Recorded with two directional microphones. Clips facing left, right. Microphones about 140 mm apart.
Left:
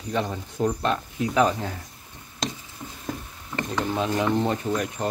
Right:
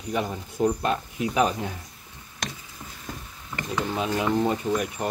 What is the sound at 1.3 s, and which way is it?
Speech, 15° right (ahead or behind).